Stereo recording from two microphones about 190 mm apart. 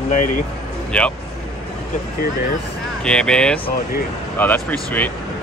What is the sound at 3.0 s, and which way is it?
Speech, 5° left (ahead or behind).